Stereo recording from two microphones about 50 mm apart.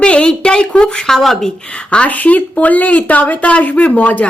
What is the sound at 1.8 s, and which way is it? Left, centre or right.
Speech, left.